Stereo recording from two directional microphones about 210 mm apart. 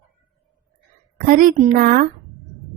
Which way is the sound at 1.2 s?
40° right (ahead or behind).